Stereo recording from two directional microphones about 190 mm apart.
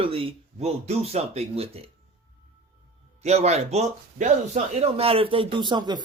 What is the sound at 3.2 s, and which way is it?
Speech, 35° right (ahead or behind).